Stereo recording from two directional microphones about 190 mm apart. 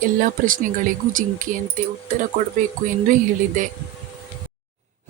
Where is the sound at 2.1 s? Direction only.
45° right (ahead or behind).